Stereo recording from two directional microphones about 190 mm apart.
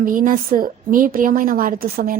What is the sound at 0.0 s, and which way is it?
A woman's voice, 45° right (ahead or behind).